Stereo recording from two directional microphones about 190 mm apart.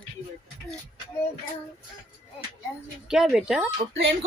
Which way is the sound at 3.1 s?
5° right (ahead or behind).